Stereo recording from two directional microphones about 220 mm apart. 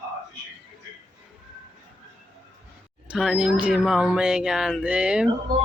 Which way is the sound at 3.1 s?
Centre (ahead or behind).